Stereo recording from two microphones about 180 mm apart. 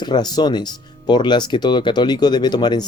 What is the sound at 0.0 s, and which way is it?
Speech, 25° left (ahead or behind).